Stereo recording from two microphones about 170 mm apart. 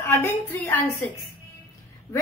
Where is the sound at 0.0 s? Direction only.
15° left (ahead or behind).